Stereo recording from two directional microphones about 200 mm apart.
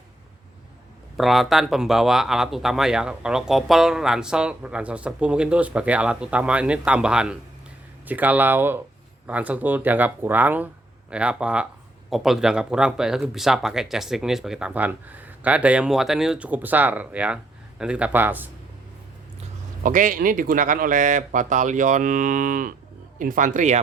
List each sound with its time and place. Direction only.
1.1 s speech: centre (ahead or behind)
19.8 s speech: 40° right (ahead or behind)